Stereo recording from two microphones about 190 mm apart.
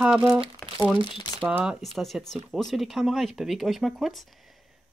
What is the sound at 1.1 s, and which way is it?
Speech, 20° left (ahead or behind).